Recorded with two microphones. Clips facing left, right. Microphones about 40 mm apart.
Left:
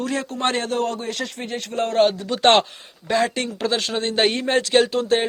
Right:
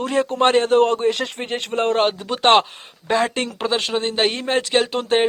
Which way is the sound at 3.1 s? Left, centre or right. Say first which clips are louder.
Right 1 dB; right.